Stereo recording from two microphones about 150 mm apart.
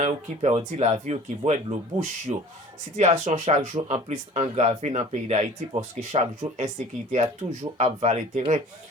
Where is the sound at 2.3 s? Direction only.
40° right (ahead or behind).